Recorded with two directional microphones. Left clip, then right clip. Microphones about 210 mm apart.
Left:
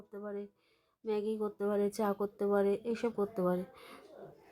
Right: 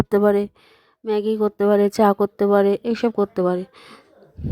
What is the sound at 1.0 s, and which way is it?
Speech, 40° right (ahead or behind).